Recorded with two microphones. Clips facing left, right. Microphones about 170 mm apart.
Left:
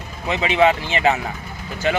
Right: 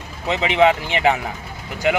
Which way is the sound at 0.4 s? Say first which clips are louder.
Right 1 dB; 20° right (ahead or behind).